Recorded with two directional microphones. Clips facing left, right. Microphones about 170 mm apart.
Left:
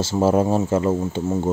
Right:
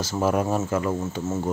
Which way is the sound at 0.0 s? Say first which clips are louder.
Left 5 dB; 25° left (ahead or behind).